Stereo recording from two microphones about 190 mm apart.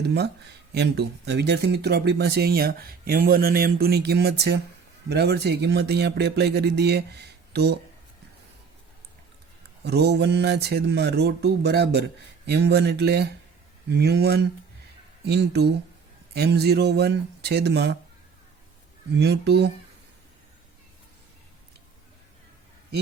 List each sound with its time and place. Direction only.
0.7 s speech: 60° right (ahead or behind)
9.8 s speech: 60° right (ahead or behind)
19.1 s speech: 60° right (ahead or behind)